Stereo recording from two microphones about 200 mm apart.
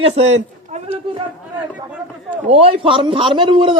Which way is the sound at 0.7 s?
30° right (ahead or behind).